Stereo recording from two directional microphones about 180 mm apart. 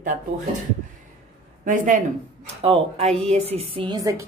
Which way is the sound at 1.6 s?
45° right (ahead or behind).